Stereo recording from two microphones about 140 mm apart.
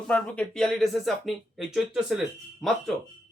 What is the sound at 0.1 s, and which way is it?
Speech, 5° left (ahead or behind).